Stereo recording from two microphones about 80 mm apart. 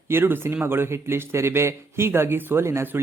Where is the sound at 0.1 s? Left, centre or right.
Right.